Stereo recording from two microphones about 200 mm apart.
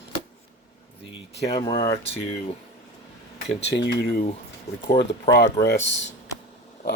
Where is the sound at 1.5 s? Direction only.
25° left (ahead or behind).